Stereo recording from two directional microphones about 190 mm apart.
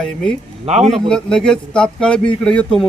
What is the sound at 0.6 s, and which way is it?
Speech, 35° right (ahead or behind).